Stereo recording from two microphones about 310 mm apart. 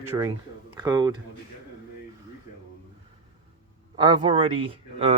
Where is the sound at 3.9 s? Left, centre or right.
Centre.